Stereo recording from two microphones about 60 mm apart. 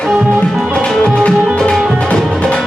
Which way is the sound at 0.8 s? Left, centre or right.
Centre.